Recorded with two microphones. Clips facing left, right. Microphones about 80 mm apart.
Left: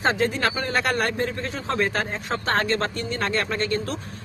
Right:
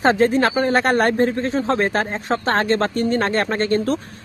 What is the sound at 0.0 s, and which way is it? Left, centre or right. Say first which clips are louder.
Speech: right 7 dB; right.